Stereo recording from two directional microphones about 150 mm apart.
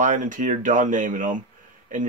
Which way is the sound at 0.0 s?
60° right (ahead or behind).